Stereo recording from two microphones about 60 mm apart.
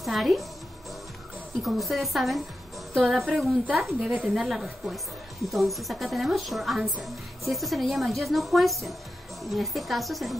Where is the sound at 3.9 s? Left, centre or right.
Centre.